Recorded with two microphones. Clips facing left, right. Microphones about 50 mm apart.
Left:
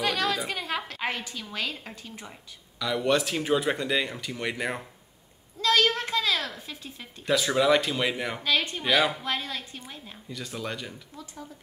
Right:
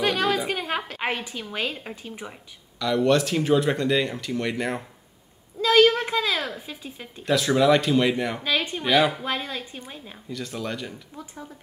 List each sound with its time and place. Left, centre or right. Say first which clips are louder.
0.0 s a woman's voice: right 4 dB; centre
2.8 s speech: right 4 dB; centre
5.6 s speech: right 6 dB; centre
7.2 s speech: right 3 dB; centre
8.5 s speech: even; centre
9.2 s a woman's voice: right 2 dB; centre
10.3 s speech: right 3 dB; centre